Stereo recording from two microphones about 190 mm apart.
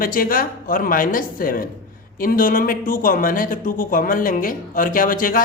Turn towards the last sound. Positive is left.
turn(degrees=45)  # may be behind; listen again after turning